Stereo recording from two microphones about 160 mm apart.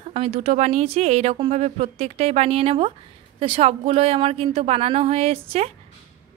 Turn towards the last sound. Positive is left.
turn(degrees=-40)  # may be behind; listen again after turning